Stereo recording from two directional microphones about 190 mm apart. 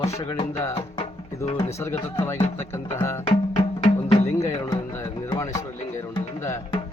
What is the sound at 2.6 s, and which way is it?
Speech, 15° left (ahead or behind).